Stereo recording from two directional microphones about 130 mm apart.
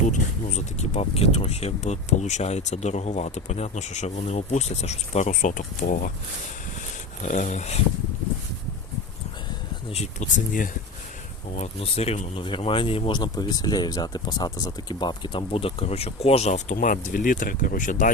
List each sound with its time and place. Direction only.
0.1 s speech: 60° left (ahead or behind); by 6.1 s 90° left
7.2 s speech: 75° left (ahead or behind)
9.9 s speech: 60° left (ahead or behind); by 10.7 s 85° left
11.8 s speech: 50° left (ahead or behind)
12.4 s speech: 40° left (ahead or behind); by 18.1 s 90° left